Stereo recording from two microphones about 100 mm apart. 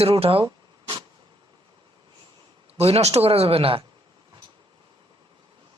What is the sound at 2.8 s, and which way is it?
Speech, 90° right.